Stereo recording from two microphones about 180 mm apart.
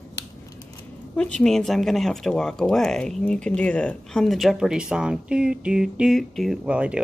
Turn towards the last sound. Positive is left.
turn(degrees=-5)  # may be behind; listen again after turning